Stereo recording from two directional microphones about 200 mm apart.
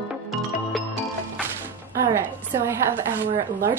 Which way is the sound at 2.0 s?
15° right (ahead or behind).